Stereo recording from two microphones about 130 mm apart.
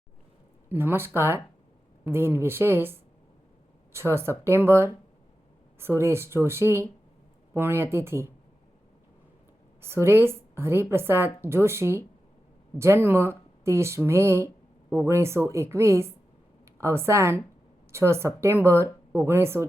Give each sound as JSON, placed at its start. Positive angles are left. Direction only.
{"t": 0.7, "sound": "speech", "side_deg": -15}
{"t": 9.8, "sound": "speech", "side_deg": -20}